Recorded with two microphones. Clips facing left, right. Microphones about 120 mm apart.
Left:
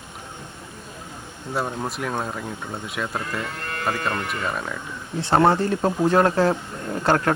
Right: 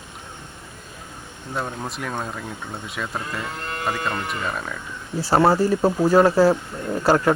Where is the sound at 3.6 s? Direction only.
20° right (ahead or behind).